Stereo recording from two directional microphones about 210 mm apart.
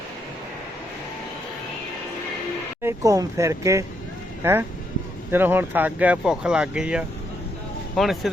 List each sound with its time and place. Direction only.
2.8 s speech: 15° right (ahead or behind)
5.3 s speech: 10° right (ahead or behind)